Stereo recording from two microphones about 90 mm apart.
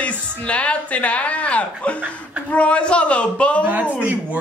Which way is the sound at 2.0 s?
20° right (ahead or behind).